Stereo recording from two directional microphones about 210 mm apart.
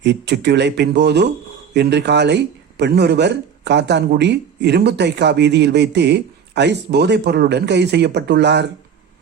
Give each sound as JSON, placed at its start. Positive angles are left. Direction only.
{"t": 0.0, "sound": "a man's voice", "side_deg": -55}